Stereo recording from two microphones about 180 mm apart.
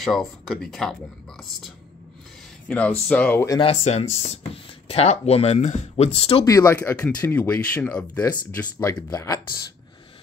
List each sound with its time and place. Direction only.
0.0 s speech: centre (ahead or behind)
2.7 s speech: 10° left (ahead or behind)
3.5 s speech: 35° left (ahead or behind)
6.4 s speech: 15° left (ahead or behind)